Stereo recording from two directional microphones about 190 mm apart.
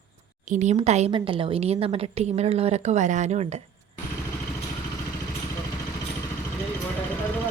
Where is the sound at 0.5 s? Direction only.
40° right (ahead or behind).